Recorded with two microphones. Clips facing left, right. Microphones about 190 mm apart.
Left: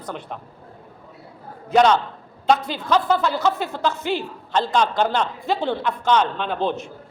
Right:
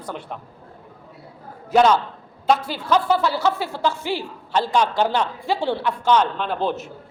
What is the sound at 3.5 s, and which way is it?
Speech, 15° left (ahead or behind).